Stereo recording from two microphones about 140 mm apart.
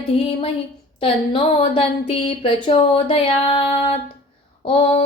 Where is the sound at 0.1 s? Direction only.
40° left (ahead or behind).